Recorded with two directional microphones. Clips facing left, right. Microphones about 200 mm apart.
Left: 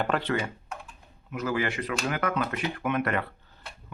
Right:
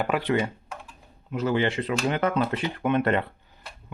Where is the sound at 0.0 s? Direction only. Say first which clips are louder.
Right 3 dB; 10° right (ahead or behind).